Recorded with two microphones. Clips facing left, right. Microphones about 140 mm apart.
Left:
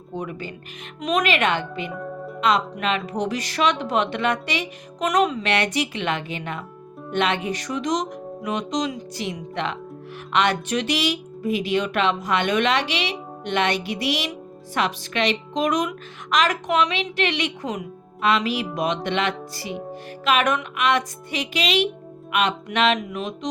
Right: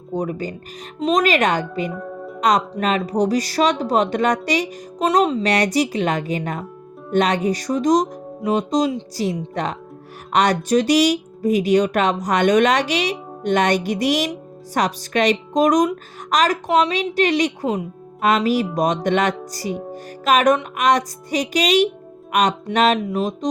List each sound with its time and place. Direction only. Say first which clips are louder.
0.1 s speech: right 7 dB; 40° right (ahead or behind)
1.9 s speech: right 2 dB; centre (ahead or behind)
2.4 s a woman's voice: right 3 dB; 40° right (ahead or behind)